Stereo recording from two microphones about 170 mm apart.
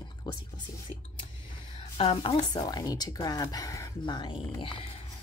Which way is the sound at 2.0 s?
30° left (ahead or behind).